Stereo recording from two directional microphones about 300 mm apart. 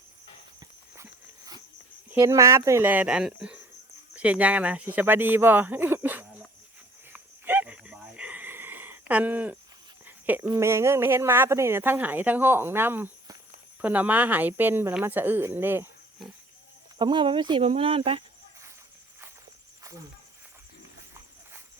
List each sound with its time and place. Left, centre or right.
0.9 s walk: centre
2.0 s speech: centre
7.1 s a sound: centre
10.1 s speech: centre